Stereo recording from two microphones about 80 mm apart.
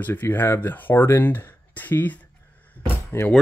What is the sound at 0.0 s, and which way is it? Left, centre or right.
Speech, left.